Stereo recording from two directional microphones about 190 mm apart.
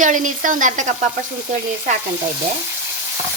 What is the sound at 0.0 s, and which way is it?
Speech, 40° right (ahead or behind).